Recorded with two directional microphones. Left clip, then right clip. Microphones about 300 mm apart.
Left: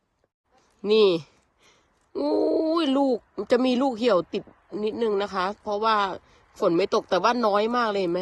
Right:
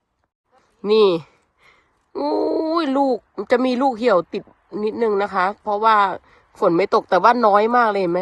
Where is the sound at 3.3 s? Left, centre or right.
Centre.